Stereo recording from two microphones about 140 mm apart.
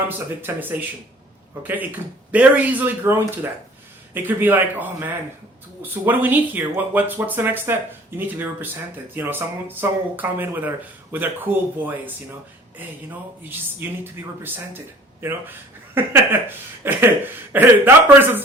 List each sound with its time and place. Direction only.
0.4 s speech: 15° right (ahead or behind)